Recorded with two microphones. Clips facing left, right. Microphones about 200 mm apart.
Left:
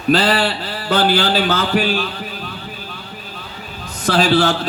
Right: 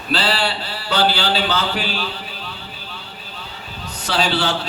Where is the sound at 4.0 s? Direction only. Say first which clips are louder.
Left 6 dB; 50° left (ahead or behind).